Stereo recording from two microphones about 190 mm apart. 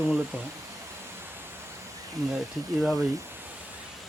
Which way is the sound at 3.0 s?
20° right (ahead or behind).